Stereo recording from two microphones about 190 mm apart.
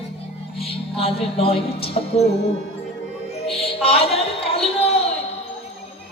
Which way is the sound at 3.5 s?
30° left (ahead or behind).